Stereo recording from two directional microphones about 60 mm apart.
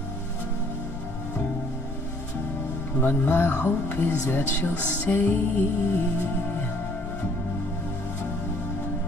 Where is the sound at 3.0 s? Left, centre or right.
Left.